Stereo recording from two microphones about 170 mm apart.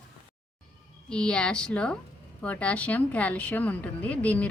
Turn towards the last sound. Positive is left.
turn(degrees=10)  # may be behind; listen again after turning